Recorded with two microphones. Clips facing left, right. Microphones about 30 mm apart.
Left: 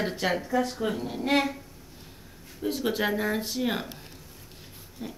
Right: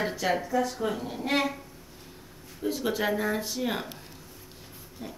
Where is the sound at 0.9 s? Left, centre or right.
Centre.